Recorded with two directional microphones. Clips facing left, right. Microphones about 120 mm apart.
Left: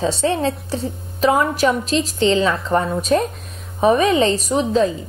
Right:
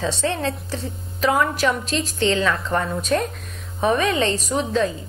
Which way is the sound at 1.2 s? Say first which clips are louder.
Left 3 dB; 25° left (ahead or behind).